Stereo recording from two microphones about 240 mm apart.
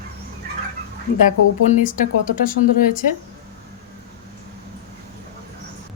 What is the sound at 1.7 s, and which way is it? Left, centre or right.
Speech, left.